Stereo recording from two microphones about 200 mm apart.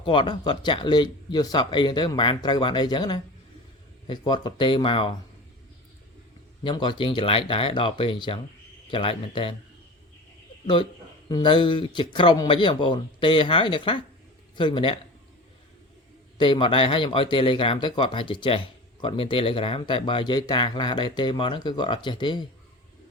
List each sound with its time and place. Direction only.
0.0 s speech: 25° left (ahead or behind)
6.7 s speech: 25° left (ahead or behind)
11.3 s speech: 20° left (ahead or behind)
16.4 s speech: 25° left (ahead or behind)